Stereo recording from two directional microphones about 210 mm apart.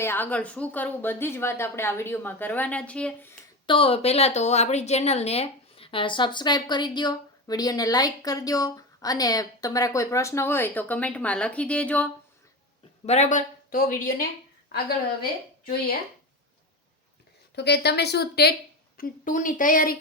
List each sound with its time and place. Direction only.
0.0 s a woman's voice: 10° left (ahead or behind)
3.7 s a woman's voice: 25° left (ahead or behind); by 12.1 s 5° left (ahead or behind)
13.1 s speech: 35° left (ahead or behind)
17.5 s speech: 50° left (ahead or behind)